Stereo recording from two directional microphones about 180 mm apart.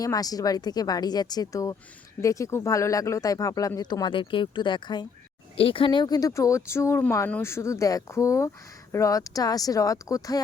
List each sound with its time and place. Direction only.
0.0 s speech: 20° left (ahead or behind)